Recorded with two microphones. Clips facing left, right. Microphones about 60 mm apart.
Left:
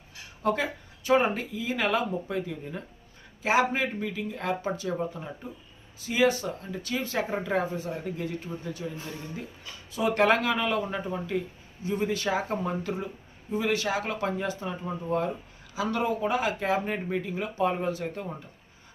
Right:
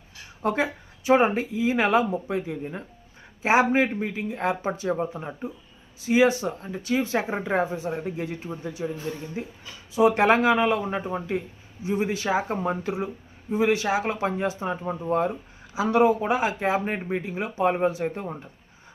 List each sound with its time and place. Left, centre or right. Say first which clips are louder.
0.4 s speech: right 2 dB; right
9.9 s speech: right 4 dB; centre
17.2 s speech: right 2 dB; centre
17.6 s speech: right 5 dB; right